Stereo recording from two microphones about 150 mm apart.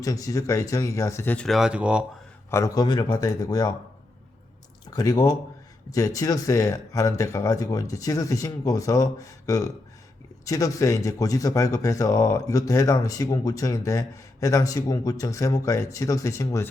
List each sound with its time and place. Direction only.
0.0 s speech: 25° left (ahead or behind)
1.5 s speech: 5° right (ahead or behind)
2.5 s speech: 20° left (ahead or behind)
4.9 s speech: 25° left (ahead or behind)